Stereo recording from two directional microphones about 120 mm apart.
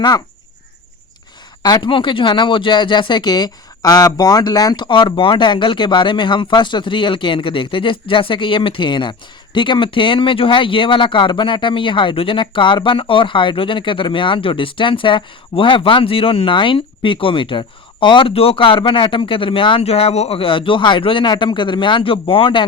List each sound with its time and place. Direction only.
1.6 s speech: 35° left (ahead or behind)